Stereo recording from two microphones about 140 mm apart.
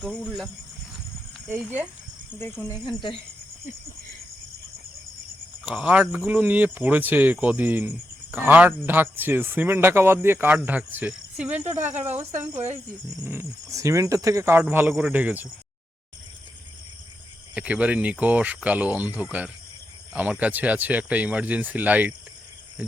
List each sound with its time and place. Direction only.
0.0 s speech: centre (ahead or behind)
2.6 s speech: 35° left (ahead or behind)
5.6 s speech: 10° right (ahead or behind)
13.2 s speech: 20° right (ahead or behind)
17.5 s speech: 10° right (ahead or behind)